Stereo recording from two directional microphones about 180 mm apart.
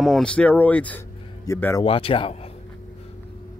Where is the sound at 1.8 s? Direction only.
30° left (ahead or behind).